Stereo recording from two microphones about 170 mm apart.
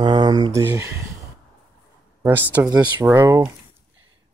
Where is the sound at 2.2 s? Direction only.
10° right (ahead or behind).